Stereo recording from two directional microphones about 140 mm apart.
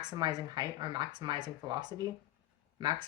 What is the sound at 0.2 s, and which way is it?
Speech, 30° right (ahead or behind).